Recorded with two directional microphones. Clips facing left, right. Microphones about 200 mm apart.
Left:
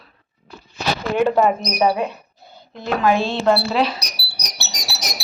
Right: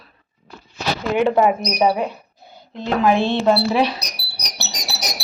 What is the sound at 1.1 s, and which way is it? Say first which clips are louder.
A woman's voice: right 1 dB; 10° right (ahead or behind).